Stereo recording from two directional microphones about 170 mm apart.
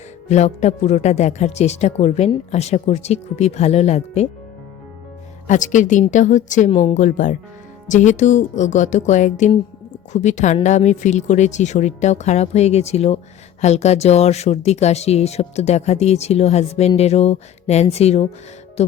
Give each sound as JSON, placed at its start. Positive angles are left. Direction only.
{"t": 0.3, "sound": "speech", "side_deg": 40}
{"t": 5.5, "sound": "speech", "side_deg": 45}
{"t": 6.7, "sound": "speech", "side_deg": 30}
{"t": 6.9, "sound": "speech", "side_deg": 50}